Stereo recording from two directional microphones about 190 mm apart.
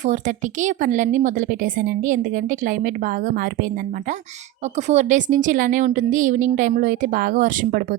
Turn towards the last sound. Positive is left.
turn(degrees=-45)  # may be behind; listen again after turning